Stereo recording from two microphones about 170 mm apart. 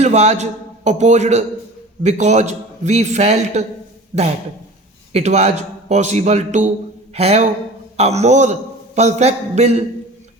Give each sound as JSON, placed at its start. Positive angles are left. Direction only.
{"t": 0.0, "sound": "a man's voice", "side_deg": -40}
{"t": 5.1, "sound": "a man's voice", "side_deg": -40}